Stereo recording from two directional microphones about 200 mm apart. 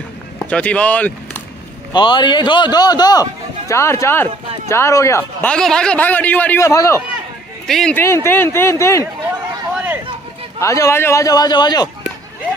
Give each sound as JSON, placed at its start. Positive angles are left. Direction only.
{"t": 0.5, "sound": "speech", "side_deg": 5}
{"t": 1.9, "sound": "a man's voice", "side_deg": 20}
{"t": 7.6, "sound": "speech", "side_deg": 0}
{"t": 10.6, "sound": "speech", "side_deg": 15}